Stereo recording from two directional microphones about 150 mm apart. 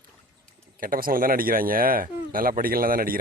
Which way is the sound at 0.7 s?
70° right (ahead or behind).